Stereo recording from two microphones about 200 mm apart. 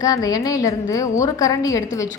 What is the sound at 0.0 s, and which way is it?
A woman's voice, 15° left (ahead or behind).